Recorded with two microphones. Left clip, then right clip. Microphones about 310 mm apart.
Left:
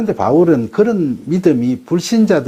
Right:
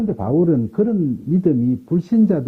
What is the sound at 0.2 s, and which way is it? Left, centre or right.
Speech, centre.